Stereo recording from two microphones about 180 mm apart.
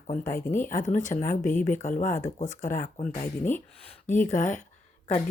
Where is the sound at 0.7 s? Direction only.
45° left (ahead or behind).